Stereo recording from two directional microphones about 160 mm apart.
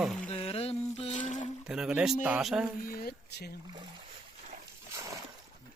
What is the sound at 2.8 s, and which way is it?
Speech, 65° left (ahead or behind).